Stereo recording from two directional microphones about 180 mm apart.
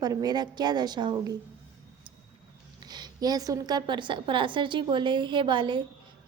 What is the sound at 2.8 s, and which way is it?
A woman's voice, 25° right (ahead or behind).